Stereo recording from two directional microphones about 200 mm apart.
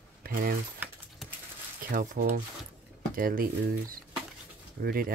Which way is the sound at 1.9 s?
40° right (ahead or behind).